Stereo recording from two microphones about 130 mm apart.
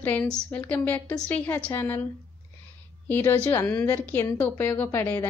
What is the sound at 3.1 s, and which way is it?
A woman's voice, 15° left (ahead or behind).